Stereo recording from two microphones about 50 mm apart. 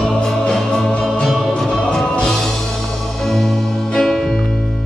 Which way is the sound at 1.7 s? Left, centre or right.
Centre.